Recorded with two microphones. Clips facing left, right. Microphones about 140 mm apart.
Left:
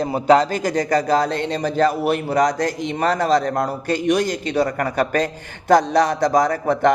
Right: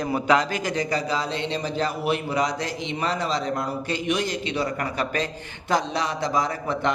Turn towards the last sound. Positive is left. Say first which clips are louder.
# left 8 dB
turn(degrees=45)  # may be behind; listen again after turning